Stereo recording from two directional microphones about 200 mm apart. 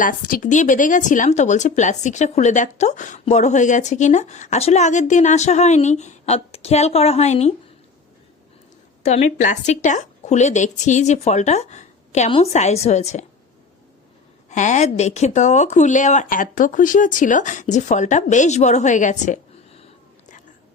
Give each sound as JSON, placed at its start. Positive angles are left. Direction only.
{"t": 0.0, "sound": "speech", "side_deg": 45}
{"t": 9.0, "sound": "speech", "side_deg": 35}
{"t": 14.5, "sound": "speech", "side_deg": 35}